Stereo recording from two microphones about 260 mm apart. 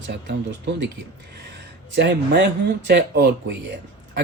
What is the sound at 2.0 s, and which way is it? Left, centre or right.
Speech, right.